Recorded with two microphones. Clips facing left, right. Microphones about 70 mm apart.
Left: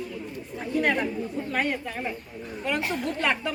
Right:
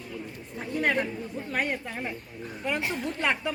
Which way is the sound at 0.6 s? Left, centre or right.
Centre.